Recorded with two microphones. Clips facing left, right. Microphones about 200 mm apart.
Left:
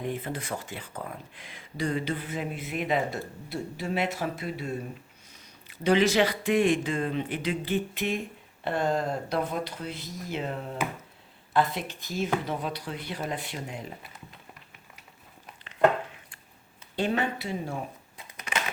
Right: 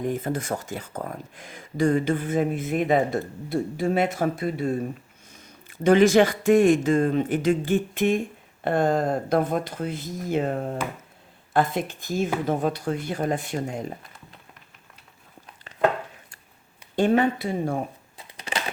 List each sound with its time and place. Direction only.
0.0 s speech: 45° right (ahead or behind)
16.9 s speech: 50° right (ahead or behind)
18.3 s a sound: 30° right (ahead or behind)